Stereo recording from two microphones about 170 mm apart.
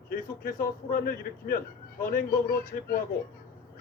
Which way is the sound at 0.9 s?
60° left (ahead or behind).